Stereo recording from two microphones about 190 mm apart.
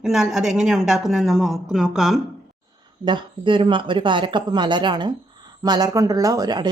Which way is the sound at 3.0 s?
25° right (ahead or behind).